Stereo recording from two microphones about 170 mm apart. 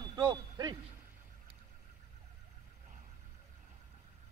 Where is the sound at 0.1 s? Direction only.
25° right (ahead or behind).